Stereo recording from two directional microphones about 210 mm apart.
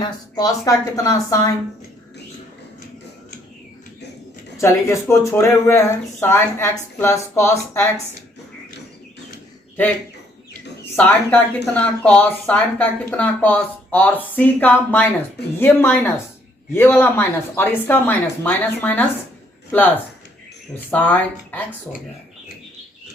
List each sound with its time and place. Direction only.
0.0 s speech: 15° left (ahead or behind)
4.5 s speech: 15° left (ahead or behind)
10.9 s speech: 5° left (ahead or behind)
20.7 s speech: 10° left (ahead or behind)